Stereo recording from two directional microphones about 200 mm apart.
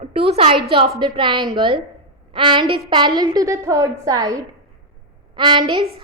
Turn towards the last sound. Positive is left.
turn(degrees=-20)  # may be behind; listen again after turning